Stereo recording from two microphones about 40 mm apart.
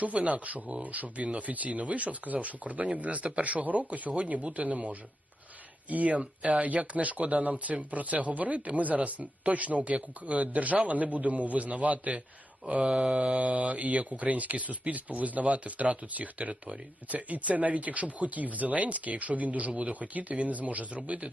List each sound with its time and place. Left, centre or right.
0.0 s speech: right